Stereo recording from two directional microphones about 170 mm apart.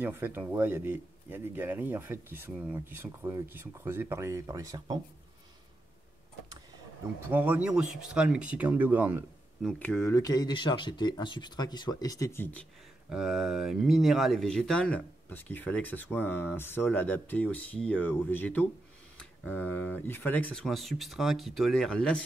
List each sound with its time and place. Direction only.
0.0 s speech: 10° right (ahead or behind)
7.2 s speech: 10° right (ahead or behind)
9.6 s speech: 5° left (ahead or behind)
13.1 s speech: centre (ahead or behind)